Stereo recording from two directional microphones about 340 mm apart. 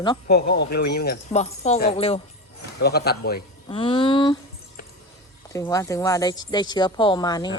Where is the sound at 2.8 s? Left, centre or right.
Left.